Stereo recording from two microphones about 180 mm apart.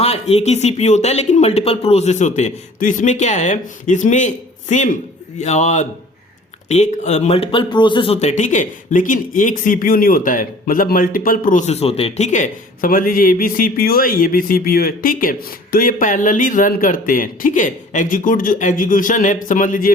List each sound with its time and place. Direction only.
0.0 s speech: 35° left (ahead or behind)